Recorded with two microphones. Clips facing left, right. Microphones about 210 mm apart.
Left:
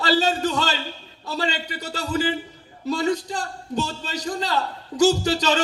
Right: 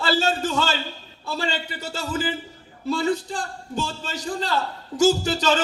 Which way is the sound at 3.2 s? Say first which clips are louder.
Left 1 dB; 40° left (ahead or behind).